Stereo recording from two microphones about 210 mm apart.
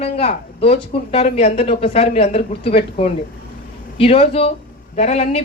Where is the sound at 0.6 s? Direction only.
30° left (ahead or behind).